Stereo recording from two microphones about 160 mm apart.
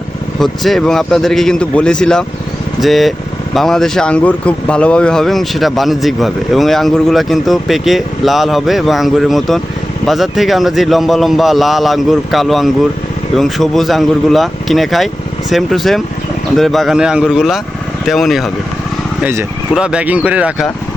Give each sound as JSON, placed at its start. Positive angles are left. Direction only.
{"t": 0.3, "sound": "speech", "side_deg": 0}
{"t": 19.2, "sound": "speech", "side_deg": -15}